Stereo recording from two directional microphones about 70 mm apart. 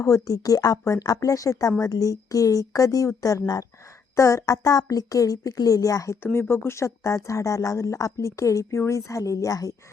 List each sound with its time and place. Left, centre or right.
0.0 s a woman's voice: left
4.1 s a woman's voice: left
6.5 s a woman's voice: left